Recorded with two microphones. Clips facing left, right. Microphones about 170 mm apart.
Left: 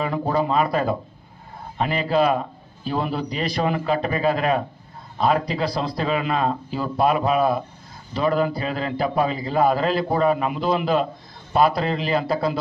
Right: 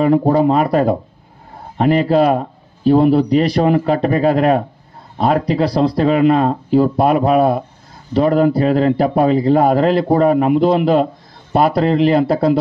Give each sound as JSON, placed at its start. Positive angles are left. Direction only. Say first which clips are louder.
{"t": 0.3, "sound": "a man's voice", "louder": "right 7 dB", "side_deg": -60}